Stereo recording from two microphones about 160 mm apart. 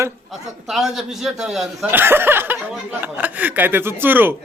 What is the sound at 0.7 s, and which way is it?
A man's voice, centre (ahead or behind).